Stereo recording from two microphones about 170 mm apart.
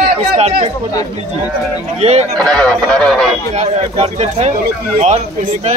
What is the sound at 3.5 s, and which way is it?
Speech, 40° right (ahead or behind).